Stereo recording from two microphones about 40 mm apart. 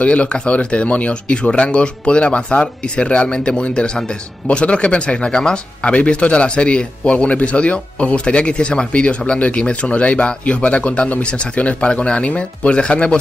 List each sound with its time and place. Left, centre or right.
0.0 s speech: left